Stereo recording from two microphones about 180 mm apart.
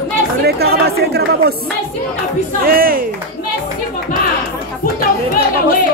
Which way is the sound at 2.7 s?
55° right (ahead or behind).